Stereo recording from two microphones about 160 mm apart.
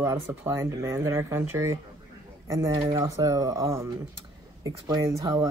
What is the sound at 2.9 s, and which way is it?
Speech, 20° right (ahead or behind).